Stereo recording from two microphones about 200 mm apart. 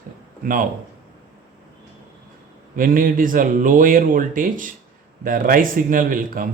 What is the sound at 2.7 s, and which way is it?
Speech, 45° right (ahead or behind).